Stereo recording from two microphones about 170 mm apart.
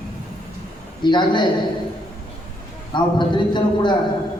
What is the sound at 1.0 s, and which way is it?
Speech, 25° left (ahead or behind).